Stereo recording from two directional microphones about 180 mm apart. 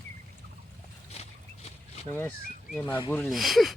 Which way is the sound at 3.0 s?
10° left (ahead or behind).